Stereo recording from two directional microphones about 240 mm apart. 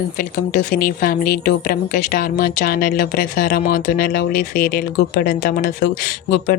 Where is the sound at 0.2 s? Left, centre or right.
Left.